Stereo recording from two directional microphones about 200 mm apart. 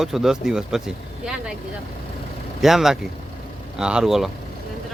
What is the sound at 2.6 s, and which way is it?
Speech, centre (ahead or behind).